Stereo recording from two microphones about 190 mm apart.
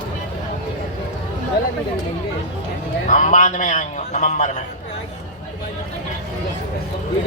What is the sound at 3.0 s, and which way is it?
A man's voice, 40° left (ahead or behind).